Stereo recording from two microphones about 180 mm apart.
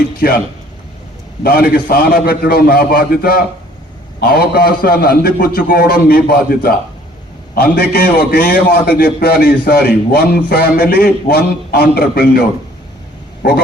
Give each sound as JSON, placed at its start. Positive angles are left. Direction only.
{"t": 1.5, "sound": "a man's voice", "side_deg": 55}